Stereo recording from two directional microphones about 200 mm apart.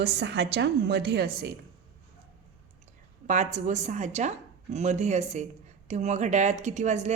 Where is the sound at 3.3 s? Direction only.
35° right (ahead or behind).